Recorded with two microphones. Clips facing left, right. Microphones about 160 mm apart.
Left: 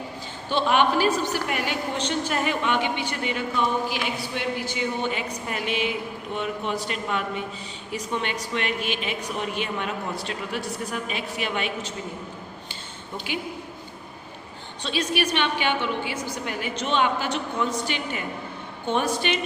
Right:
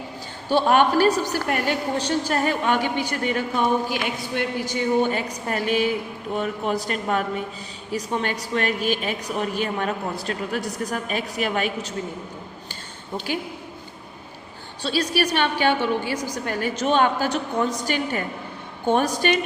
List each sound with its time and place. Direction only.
0.5 s a man's voice: 45° right (ahead or behind)
14.8 s a man's voice: 40° right (ahead or behind)